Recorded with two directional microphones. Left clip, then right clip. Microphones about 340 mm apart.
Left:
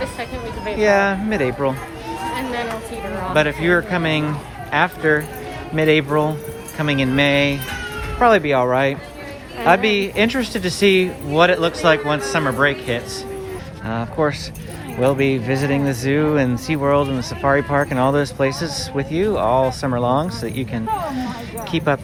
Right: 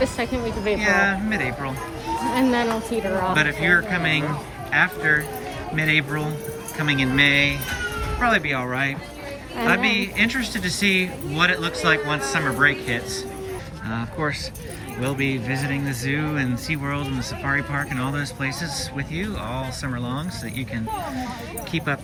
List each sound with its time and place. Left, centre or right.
0.0 s speech: right
0.8 s speech: centre
2.3 s speech: centre
3.3 s speech: centre